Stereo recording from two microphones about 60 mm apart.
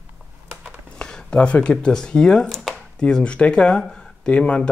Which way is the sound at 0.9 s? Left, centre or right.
Centre.